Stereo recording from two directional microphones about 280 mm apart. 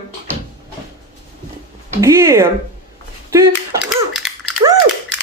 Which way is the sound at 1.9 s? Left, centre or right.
Centre.